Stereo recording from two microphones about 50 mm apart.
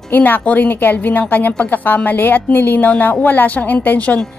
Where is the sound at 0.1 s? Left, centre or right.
Left.